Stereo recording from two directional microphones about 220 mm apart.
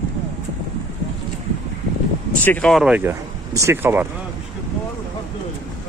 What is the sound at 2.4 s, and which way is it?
Speech, 5° left (ahead or behind).